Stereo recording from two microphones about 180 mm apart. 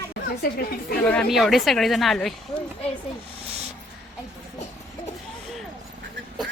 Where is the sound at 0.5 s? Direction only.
55° left (ahead or behind).